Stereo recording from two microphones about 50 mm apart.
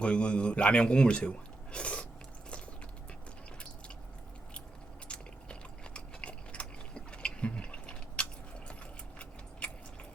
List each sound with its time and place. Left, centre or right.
0.0 s a man's voice: left
5.0 s biting: left
9.6 s a sound: left